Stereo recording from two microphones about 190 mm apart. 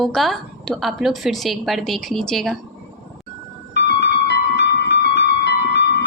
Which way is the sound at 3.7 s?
60° left (ahead or behind).